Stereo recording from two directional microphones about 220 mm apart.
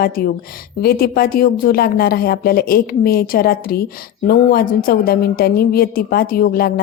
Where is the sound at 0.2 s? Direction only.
40° left (ahead or behind).